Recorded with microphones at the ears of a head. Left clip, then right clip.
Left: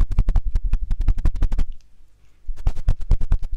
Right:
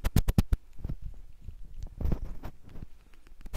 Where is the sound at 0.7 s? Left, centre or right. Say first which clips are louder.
Left 10 dB; left.